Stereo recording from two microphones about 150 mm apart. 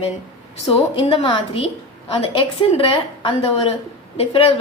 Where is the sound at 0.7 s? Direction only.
35° left (ahead or behind).